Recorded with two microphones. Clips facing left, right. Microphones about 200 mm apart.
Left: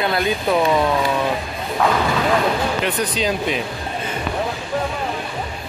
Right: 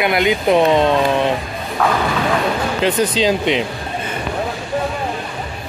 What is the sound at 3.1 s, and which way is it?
Speech, 25° right (ahead or behind).